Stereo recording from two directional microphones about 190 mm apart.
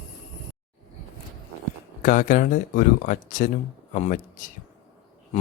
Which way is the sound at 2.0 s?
45° left (ahead or behind).